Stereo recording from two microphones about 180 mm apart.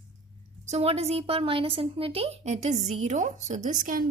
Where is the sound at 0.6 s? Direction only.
35° right (ahead or behind).